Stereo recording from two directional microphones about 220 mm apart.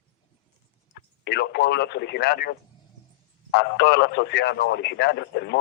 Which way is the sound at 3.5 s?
50° left (ahead or behind).